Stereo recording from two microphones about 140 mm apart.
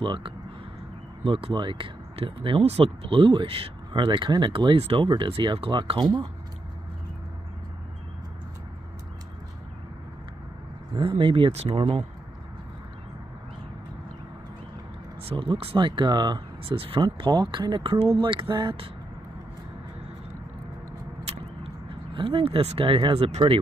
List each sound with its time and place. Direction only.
0.0 s speech: 35° right (ahead or behind)
11.0 s speech: 35° right (ahead or behind)
15.2 s speech: 40° right (ahead or behind)
21.3 s vehicle: 50° right (ahead or behind)
22.1 s speech: 40° right (ahead or behind)